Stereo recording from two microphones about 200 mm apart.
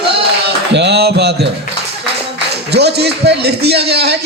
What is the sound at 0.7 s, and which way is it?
Speech, 55° right (ahead or behind).